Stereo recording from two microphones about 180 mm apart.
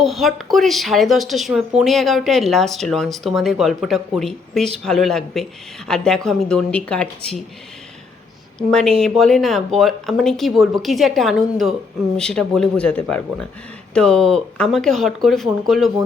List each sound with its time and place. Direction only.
0.0 s speech: centre (ahead or behind)
8.5 s speech: 5° left (ahead or behind)